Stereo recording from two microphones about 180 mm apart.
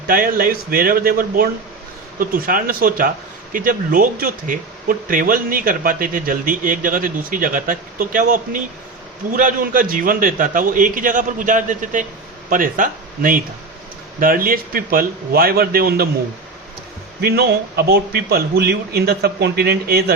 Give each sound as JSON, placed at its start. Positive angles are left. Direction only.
{"t": 0.1, "sound": "a man's voice", "side_deg": -55}
{"t": 17.2, "sound": "a man's voice", "side_deg": -60}